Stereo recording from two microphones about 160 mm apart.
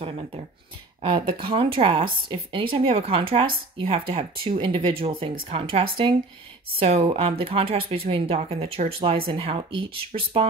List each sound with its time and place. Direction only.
1.0 s a woman's voice: 30° right (ahead or behind)